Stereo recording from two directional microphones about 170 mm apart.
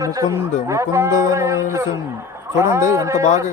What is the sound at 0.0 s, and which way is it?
A man's voice, 20° right (ahead or behind).